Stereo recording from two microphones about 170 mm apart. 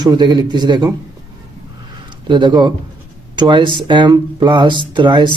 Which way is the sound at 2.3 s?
25° right (ahead or behind).